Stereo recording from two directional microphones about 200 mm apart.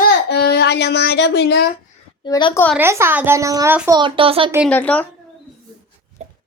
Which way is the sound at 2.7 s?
10° right (ahead or behind).